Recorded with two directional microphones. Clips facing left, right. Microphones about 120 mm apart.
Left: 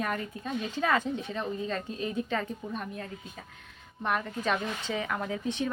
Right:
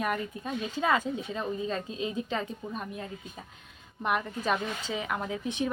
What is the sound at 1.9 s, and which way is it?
A woman's voice, 20° right (ahead or behind).